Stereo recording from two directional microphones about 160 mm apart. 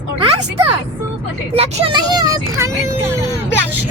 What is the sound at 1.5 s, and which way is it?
Speech, 35° right (ahead or behind).